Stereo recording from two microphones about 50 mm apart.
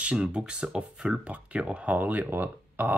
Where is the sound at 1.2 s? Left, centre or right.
Right.